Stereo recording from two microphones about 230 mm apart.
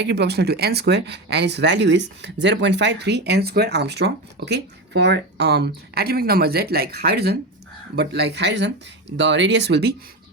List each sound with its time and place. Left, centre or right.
0.0 s speech: right